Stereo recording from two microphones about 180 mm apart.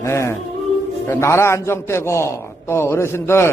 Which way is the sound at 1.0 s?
15° left (ahead or behind).